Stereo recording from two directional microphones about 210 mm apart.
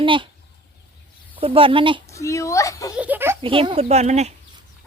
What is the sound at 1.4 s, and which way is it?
Speech, 25° right (ahead or behind).